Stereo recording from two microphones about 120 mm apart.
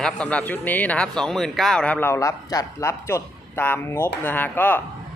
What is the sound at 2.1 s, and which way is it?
A man's voice, 25° left (ahead or behind).